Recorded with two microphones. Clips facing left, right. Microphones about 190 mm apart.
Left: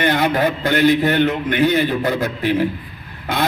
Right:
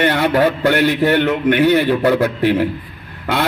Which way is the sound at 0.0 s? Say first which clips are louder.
Right 3 dB; 65° right (ahead or behind).